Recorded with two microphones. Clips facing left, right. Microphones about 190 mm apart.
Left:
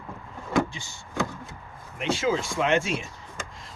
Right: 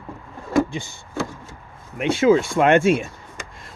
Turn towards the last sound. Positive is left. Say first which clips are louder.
# right 9 dB
turn(degrees=-55)  # may be behind; listen again after turning